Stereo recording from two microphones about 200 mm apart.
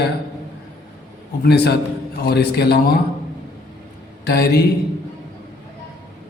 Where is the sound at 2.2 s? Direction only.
55° left (ahead or behind).